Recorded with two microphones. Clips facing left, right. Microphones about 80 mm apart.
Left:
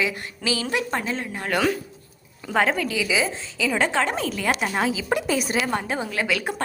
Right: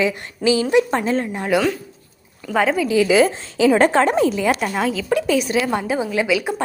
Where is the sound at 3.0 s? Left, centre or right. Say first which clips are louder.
Right 9 dB; right.